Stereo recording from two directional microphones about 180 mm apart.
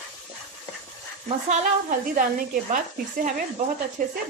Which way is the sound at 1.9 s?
50° right (ahead or behind).